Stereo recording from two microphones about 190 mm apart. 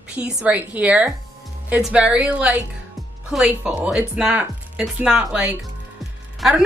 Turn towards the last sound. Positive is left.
turn(degrees=0)  # may be behind; listen again after turning